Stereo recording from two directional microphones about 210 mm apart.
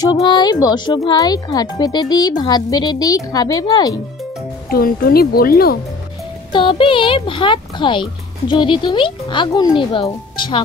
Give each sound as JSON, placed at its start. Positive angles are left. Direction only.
{"t": 0.0, "sound": "speech", "side_deg": 20}
{"t": 4.6, "sound": "speech", "side_deg": 45}
{"t": 6.5, "sound": "speech", "side_deg": 25}